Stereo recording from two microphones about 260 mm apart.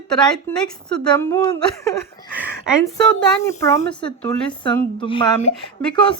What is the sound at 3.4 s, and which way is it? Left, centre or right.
A woman's voice, centre.